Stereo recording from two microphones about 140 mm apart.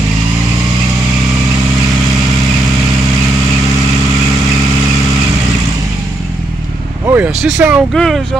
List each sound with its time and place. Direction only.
7.1 s vehicle: 10° right (ahead or behind)
7.4 s speech: 10° right (ahead or behind)
7.9 s speech: 5° left (ahead or behind)